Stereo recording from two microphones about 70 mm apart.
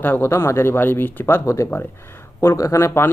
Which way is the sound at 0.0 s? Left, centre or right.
Left.